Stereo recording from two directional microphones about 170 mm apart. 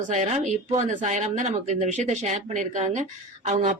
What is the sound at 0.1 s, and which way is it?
Speech, 45° right (ahead or behind).